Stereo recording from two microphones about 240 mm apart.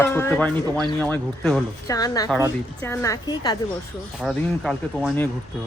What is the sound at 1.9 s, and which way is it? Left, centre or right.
Speech, centre.